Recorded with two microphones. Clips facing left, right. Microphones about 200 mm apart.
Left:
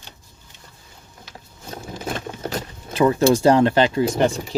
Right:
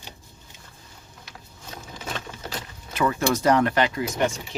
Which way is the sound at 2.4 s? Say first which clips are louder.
Left 7 dB; 40° left (ahead or behind).